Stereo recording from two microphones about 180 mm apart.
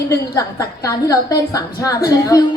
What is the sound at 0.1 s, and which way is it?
A woman's voice, 20° left (ahead or behind).